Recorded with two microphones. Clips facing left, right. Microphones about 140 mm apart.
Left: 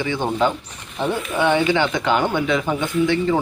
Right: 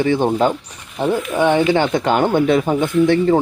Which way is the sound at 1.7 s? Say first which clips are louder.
Right 3 dB; 45° right (ahead or behind).